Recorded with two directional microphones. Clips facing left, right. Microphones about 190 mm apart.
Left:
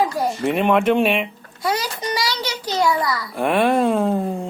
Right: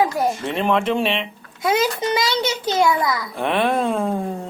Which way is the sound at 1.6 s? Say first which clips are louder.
Right 4 dB; 25° right (ahead or behind).